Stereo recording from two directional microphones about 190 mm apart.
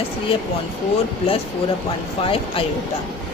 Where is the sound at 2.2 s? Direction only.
30° left (ahead or behind).